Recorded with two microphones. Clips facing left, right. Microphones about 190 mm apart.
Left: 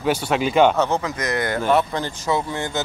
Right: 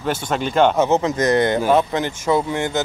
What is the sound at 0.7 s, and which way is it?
Speech, 20° right (ahead or behind).